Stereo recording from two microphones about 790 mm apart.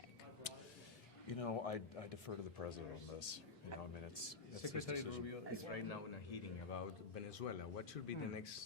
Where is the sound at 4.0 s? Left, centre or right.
Left.